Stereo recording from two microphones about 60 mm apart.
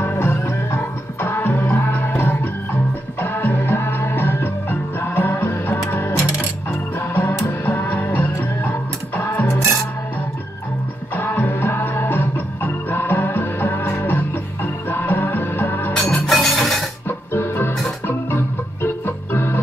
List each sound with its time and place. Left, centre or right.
0.0 s music: left
5.9 s coin: left
7.6 s music: left
11.1 s music: left
16.0 s music: centre
17.3 s music: left
18.0 s organ: left